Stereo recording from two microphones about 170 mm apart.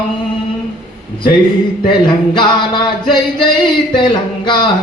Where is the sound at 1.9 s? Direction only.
25° left (ahead or behind).